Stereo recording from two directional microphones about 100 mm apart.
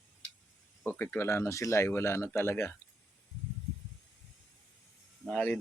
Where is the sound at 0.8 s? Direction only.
20° left (ahead or behind).